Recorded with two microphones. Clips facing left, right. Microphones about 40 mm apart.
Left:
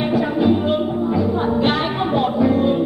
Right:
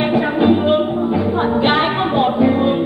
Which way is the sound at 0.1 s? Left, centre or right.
Right.